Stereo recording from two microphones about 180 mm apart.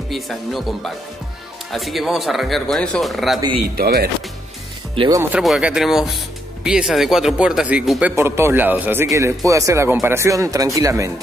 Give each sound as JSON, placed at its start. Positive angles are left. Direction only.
{"t": 0.1, "sound": "speech", "side_deg": 0}
{"t": 3.6, "sound": "speech", "side_deg": -55}
{"t": 4.9, "sound": "speech", "side_deg": -30}
{"t": 5.2, "sound": "speech", "side_deg": -5}